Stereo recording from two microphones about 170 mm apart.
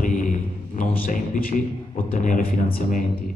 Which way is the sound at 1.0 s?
55° left (ahead or behind).